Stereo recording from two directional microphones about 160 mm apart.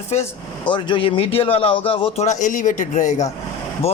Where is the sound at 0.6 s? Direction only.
30° left (ahead or behind).